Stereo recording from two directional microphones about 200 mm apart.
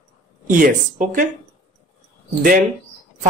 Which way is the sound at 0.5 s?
40° right (ahead or behind).